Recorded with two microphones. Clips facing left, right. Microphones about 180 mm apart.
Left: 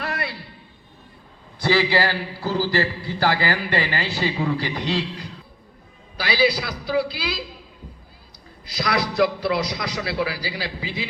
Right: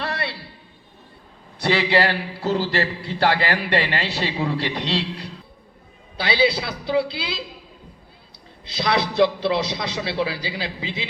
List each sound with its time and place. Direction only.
0.0 s a sound: 30° right (ahead or behind)
1.6 s a man's voice: 25° right (ahead or behind)
6.1 s a man's voice: 25° right (ahead or behind)
8.6 s a man's voice: 25° right (ahead or behind)